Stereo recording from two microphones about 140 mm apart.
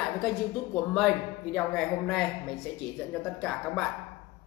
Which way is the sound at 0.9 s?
Centre (ahead or behind).